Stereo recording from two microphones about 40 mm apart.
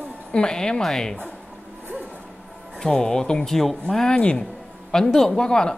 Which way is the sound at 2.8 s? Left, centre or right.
Centre.